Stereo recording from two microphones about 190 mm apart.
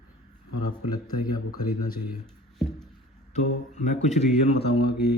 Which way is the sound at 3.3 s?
40° left (ahead or behind).